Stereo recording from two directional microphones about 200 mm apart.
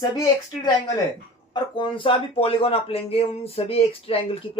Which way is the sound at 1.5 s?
25° left (ahead or behind).